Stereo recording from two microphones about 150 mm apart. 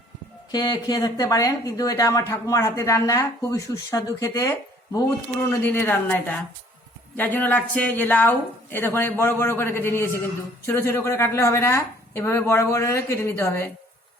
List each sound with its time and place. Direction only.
0.5 s speech: 25° left (ahead or behind)
7.2 s a woman's voice: 10° left (ahead or behind)